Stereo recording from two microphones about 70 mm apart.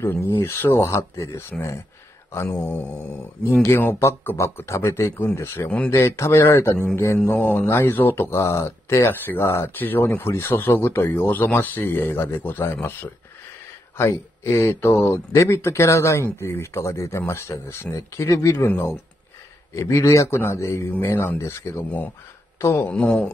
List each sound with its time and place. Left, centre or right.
0.0 s speech: left
2.6 s mantra: left
3.6 s a man's voice: left
19.7 s a man's voice: left
22.9 s speech: centre